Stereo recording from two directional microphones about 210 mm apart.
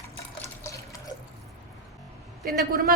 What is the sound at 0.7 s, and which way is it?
Water tap, 15° left (ahead or behind).